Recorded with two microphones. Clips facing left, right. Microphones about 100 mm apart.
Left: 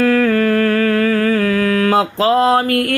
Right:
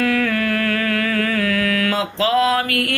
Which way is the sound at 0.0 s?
35° left (ahead or behind).